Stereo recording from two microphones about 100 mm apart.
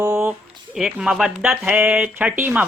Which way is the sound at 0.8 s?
5° right (ahead or behind).